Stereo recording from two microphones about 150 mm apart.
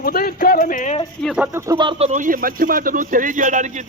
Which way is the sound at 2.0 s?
60° right (ahead or behind).